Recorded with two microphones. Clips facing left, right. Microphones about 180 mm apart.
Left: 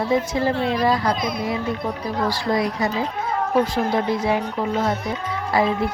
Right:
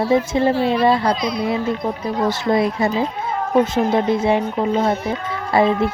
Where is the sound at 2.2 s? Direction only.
20° right (ahead or behind).